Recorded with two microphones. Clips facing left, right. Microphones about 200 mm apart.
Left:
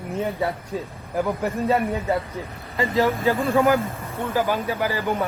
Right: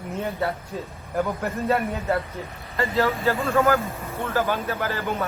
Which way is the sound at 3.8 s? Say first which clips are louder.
Left 2 dB; centre (ahead or behind).